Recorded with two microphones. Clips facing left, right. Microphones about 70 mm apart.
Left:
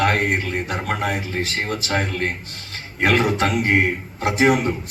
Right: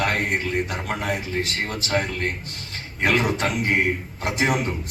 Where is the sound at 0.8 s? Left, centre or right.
Left.